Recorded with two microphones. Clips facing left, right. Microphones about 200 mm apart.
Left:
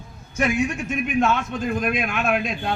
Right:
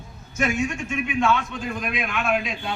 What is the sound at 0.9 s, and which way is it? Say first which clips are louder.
A man's voice: even; 40° left (ahead or behind).